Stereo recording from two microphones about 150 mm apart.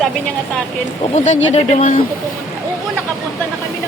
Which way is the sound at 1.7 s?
55° left (ahead or behind).